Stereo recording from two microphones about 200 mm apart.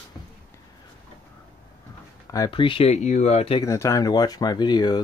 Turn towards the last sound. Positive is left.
turn(degrees=20)  # may be behind; listen again after turning